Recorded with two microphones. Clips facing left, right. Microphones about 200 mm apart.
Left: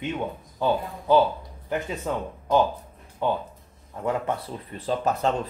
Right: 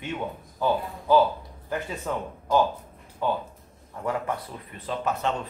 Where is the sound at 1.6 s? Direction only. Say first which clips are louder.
Left 2 dB; 20° left (ahead or behind).